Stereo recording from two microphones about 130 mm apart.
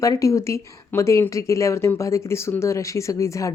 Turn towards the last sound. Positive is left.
turn(degrees=25)  # may be behind; listen again after turning